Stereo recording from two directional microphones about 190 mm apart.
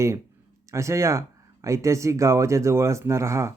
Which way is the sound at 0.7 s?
15° right (ahead or behind).